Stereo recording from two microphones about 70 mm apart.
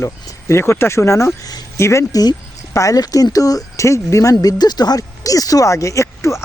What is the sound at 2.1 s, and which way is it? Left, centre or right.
Speech, left.